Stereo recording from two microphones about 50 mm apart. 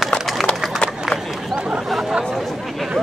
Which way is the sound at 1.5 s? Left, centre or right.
Centre.